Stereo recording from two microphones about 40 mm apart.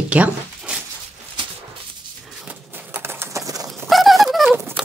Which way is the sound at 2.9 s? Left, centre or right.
Right.